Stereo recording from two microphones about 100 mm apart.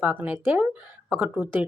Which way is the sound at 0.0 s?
20° right (ahead or behind).